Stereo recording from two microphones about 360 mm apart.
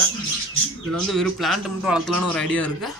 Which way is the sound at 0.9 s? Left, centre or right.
Centre.